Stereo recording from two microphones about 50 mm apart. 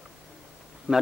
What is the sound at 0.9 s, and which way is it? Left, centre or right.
Speech, right.